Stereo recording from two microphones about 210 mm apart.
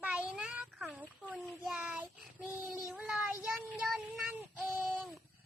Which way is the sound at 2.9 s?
5° right (ahead or behind).